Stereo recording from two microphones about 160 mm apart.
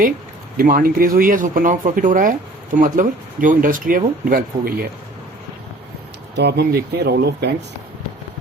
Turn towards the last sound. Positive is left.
turn(degrees=-90)